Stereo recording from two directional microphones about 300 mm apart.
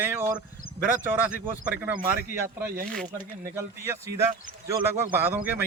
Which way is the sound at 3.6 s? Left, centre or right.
Centre.